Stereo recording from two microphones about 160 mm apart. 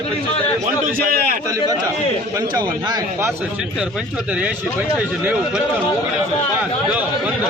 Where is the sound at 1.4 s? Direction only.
25° right (ahead or behind).